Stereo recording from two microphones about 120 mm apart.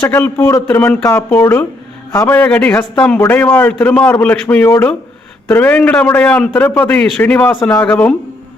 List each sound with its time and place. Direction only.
0.0 s a man's voice: 15° left (ahead or behind)